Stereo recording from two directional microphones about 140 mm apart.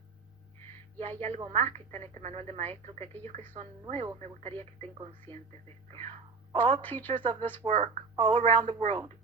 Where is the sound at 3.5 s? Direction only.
35° right (ahead or behind).